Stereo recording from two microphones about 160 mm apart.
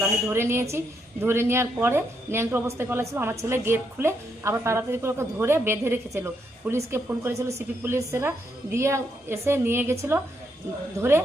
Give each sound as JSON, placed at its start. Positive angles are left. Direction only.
{"t": 0.0, "sound": "a woman's voice", "side_deg": -15}